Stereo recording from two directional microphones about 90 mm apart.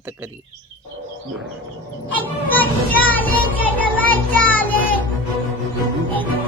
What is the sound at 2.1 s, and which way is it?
Children playing, 20° left (ahead or behind).